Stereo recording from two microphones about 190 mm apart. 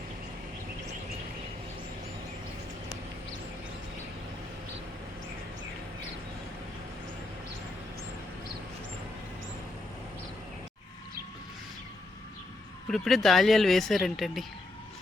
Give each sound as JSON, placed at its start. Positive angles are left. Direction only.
{"t": 12.9, "sound": "speech", "side_deg": 0}